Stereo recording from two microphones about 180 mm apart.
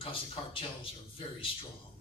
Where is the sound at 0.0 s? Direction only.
30° left (ahead or behind).